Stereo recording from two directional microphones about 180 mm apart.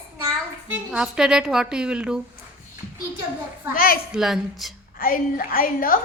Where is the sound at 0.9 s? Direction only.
5° right (ahead or behind).